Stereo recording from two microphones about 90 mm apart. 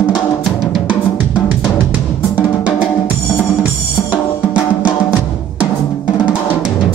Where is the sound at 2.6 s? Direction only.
15° right (ahead or behind).